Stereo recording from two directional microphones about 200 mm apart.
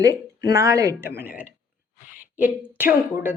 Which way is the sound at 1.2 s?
10° right (ahead or behind).